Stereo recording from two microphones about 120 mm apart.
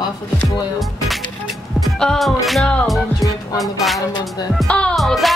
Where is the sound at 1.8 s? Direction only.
5° left (ahead or behind).